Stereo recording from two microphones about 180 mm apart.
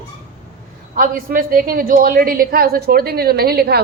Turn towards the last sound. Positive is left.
turn(degrees=-60)  # may be behind; listen again after turning